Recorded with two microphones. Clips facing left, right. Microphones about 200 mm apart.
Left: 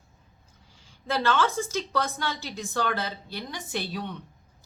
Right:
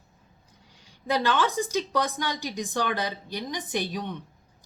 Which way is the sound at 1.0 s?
15° right (ahead or behind).